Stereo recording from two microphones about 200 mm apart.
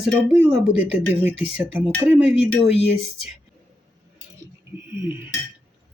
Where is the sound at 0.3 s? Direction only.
5° right (ahead or behind).